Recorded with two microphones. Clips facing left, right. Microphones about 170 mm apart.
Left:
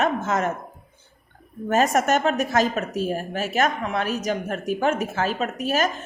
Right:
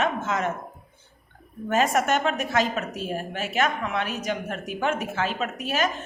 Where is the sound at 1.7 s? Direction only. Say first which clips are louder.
Left 3 dB; 40° left (ahead or behind).